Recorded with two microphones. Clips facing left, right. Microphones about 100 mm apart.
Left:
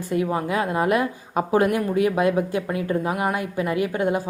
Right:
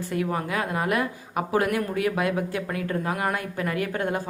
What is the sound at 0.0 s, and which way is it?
A woman's voice, 20° left (ahead or behind).